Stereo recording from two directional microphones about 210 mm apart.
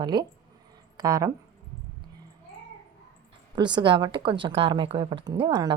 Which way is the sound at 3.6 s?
20° right (ahead or behind).